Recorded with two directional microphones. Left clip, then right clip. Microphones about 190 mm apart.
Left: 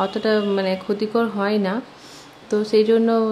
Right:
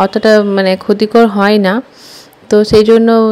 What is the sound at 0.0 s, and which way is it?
Speech, 40° right (ahead or behind).